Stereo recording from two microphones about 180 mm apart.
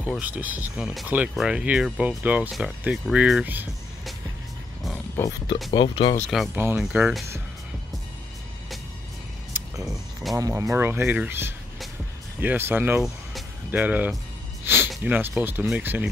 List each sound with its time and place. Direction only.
0.0 s speech: 10° right (ahead or behind)
5.1 s speech: 15° left (ahead or behind)
6.3 s speech: centre (ahead or behind)
10.3 s speech: 20° right (ahead or behind)